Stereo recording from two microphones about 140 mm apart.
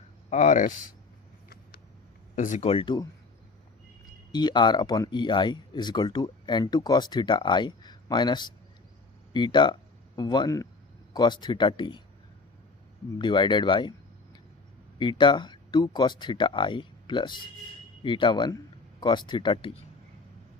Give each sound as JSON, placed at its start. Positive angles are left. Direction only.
{"t": 0.3, "sound": "speech", "side_deg": 60}
{"t": 2.3, "sound": "speech", "side_deg": 60}
{"t": 2.6, "sound": "speech", "side_deg": 40}
{"t": 4.3, "sound": "speech", "side_deg": 30}
{"t": 13.1, "sound": "speech", "side_deg": 35}
{"t": 14.9, "sound": "speech", "side_deg": 35}